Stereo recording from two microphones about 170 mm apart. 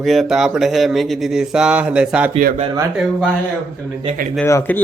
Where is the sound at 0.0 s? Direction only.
Centre (ahead or behind).